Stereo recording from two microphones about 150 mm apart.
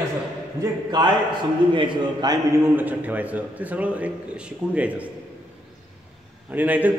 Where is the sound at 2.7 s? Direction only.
10° right (ahead or behind).